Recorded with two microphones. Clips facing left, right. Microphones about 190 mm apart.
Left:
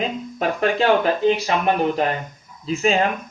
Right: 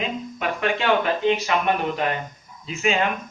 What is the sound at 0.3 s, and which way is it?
Speech, 40° left (ahead or behind).